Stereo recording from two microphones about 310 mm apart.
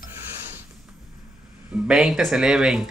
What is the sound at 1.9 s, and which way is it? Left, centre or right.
Speech, centre.